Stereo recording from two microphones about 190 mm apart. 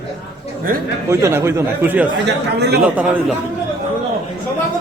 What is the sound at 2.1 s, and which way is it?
Speech, 65° right (ahead or behind).